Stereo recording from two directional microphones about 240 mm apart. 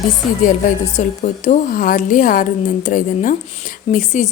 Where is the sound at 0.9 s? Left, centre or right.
Left.